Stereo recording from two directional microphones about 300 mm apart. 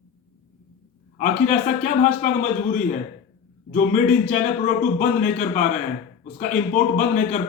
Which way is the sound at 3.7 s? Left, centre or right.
Left.